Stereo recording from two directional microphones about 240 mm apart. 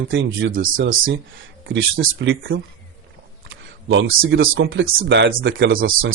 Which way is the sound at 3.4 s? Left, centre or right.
Right.